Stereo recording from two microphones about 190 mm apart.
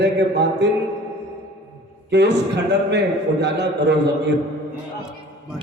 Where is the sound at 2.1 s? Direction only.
65° right (ahead or behind).